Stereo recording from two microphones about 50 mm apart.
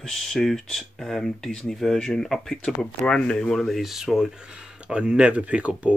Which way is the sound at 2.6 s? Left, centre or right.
Centre.